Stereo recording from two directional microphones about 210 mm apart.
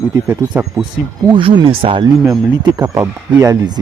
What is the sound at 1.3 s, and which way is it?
Speech, 25° right (ahead or behind).